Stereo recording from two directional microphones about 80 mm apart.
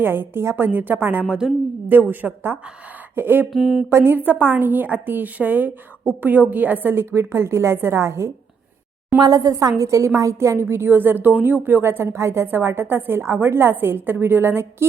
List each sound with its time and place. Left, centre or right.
0.0 s a woman's voice: right
1.2 s a woman's voice: centre
1.9 s a woman's voice: right
3.5 s a sound: centre
3.8 s a woman's voice: right
9.2 s a woman's voice: right